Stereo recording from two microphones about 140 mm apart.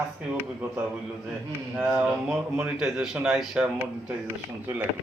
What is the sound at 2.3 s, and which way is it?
Speech, 5° right (ahead or behind).